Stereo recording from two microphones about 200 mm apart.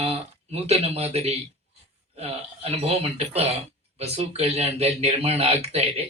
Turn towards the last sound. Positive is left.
turn(degrees=-30)  # may be behind; listen again after turning